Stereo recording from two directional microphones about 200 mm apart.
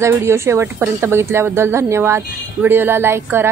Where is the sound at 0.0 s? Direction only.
15° right (ahead or behind).